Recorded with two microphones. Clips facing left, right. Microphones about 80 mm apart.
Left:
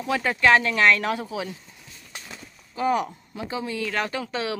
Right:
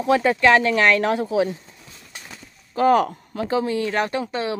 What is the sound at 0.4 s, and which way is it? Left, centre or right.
Speech, right.